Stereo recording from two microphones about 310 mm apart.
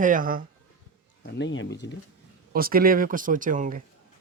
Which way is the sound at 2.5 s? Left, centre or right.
Right.